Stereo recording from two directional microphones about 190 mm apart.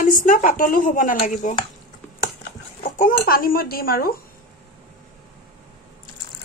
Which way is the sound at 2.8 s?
45° left (ahead or behind).